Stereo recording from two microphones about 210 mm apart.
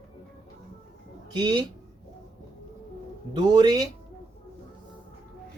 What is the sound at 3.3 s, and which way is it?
Speech, 20° right (ahead or behind).